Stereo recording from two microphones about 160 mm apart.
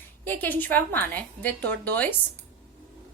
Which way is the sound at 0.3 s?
10° left (ahead or behind).